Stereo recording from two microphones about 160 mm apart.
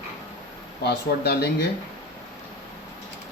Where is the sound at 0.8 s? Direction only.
90° left.